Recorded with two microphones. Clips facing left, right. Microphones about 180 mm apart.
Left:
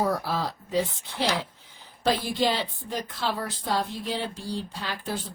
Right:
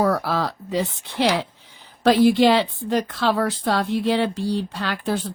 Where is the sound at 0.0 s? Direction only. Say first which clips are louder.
Right 6 dB; 70° right (ahead or behind).